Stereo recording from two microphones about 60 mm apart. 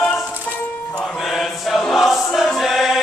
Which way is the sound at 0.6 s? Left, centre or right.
Left.